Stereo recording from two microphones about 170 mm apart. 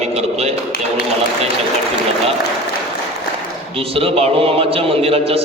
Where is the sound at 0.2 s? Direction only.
40° right (ahead or behind).